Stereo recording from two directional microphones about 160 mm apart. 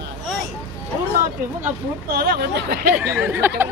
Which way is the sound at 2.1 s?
70° right (ahead or behind).